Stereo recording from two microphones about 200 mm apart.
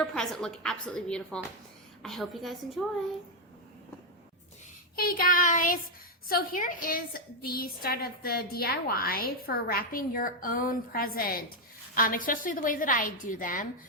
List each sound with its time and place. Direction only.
0.0 s a woman's voice: 5° left (ahead or behind)
4.9 s a woman's voice: 45° left (ahead or behind)